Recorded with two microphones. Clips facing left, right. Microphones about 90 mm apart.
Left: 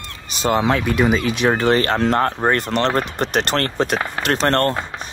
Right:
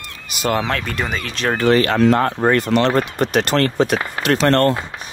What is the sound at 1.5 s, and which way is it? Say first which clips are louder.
Speech: right 2 dB; 30° left (ahead or behind).